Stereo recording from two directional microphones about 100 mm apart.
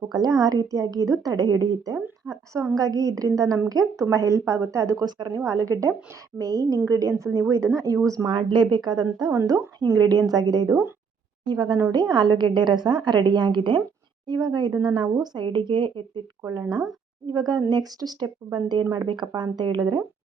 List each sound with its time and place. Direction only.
0.1 s a woman's voice: 45° right (ahead or behind)
5.4 s a woman's voice: 35° right (ahead or behind)
9.4 s speech: 25° right (ahead or behind)
9.8 s a woman's voice: 40° right (ahead or behind)
16.4 s a woman's voice: 30° right (ahead or behind)